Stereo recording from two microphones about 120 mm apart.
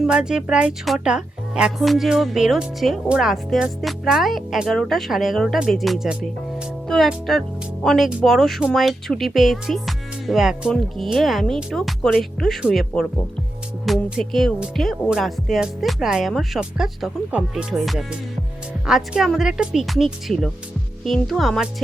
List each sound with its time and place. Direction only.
0.0 s speech: 5° right (ahead or behind)